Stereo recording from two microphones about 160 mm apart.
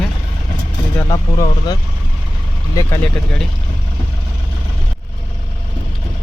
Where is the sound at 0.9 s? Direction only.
25° left (ahead or behind).